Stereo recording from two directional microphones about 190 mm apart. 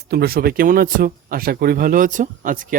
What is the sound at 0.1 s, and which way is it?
Speech, 55° right (ahead or behind).